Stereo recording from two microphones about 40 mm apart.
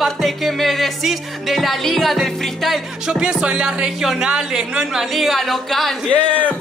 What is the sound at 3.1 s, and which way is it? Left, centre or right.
Speech, right.